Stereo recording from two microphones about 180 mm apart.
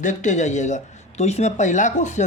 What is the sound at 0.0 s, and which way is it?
Speech, 40° left (ahead or behind).